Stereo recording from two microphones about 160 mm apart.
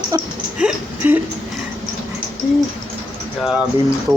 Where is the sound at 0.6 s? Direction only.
10° right (ahead or behind).